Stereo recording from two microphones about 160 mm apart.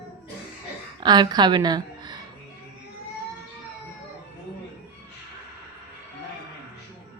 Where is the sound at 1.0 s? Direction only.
25° right (ahead or behind).